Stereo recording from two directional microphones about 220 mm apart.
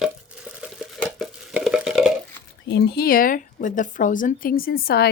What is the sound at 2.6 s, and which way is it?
Speech, 50° left (ahead or behind).